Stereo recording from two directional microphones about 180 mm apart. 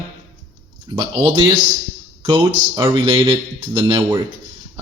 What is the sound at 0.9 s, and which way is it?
Speech, 25° right (ahead or behind).